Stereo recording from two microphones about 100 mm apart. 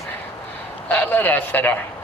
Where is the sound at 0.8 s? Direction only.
20° left (ahead or behind).